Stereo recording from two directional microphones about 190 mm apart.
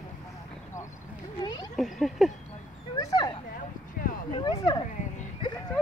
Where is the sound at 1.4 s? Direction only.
20° left (ahead or behind).